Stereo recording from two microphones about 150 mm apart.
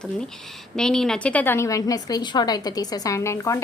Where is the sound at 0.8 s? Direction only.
5° left (ahead or behind).